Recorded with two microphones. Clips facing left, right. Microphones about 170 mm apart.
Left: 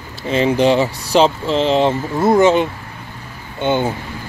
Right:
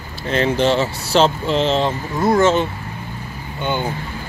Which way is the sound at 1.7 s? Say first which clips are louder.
Left 4 dB; 20° left (ahead or behind).